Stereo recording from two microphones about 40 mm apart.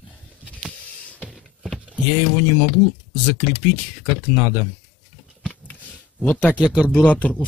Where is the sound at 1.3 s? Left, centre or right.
Centre.